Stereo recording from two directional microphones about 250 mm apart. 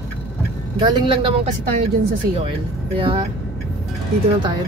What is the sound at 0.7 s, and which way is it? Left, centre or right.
Speech, centre.